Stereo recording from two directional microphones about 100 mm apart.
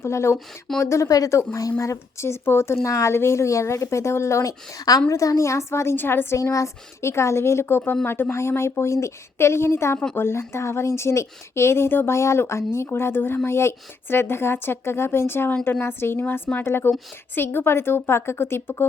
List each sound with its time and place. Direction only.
0.0 s speech: 25° left (ahead or behind)